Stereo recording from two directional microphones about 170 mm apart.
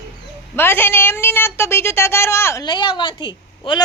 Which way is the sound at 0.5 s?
15° left (ahead or behind).